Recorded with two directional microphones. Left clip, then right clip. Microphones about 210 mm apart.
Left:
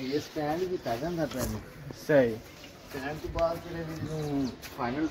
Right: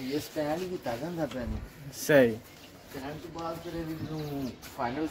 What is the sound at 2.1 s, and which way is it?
Speech, 55° right (ahead or behind).